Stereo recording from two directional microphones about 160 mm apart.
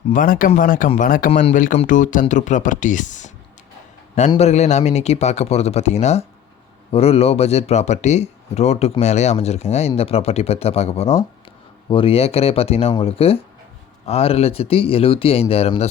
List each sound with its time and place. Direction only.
0.1 s speech: 60° left (ahead or behind)
4.4 s speech: 45° left (ahead or behind)